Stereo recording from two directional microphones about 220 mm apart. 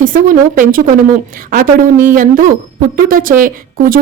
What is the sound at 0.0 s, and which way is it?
Speech, 40° right (ahead or behind).